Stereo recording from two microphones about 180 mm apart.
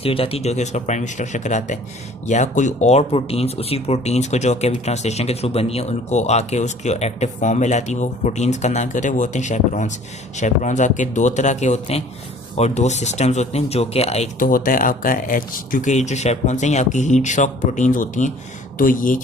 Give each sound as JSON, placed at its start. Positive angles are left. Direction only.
{"t": 0.0, "sound": "speech", "side_deg": 30}